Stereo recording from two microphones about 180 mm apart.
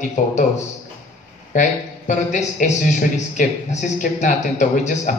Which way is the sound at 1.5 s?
45° left (ahead or behind).